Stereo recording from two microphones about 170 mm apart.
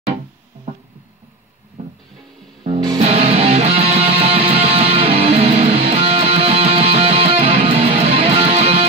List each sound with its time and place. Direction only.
3.0 s music: 40° right (ahead or behind)